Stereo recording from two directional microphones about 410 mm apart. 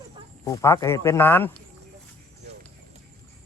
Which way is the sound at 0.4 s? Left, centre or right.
Centre.